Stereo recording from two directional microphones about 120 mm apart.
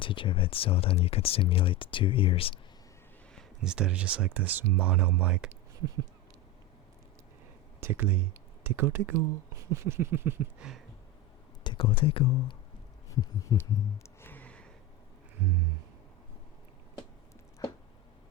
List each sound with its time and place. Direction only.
0.0 s speech: 45° left (ahead or behind)
3.6 s speech: 5° right (ahead or behind)
7.8 s speech: 15° right (ahead or behind)
11.6 s speech: 45° left (ahead or behind)
13.1 s heart sounds: 30° left (ahead or behind)
13.6 s a sound: 20° left (ahead or behind)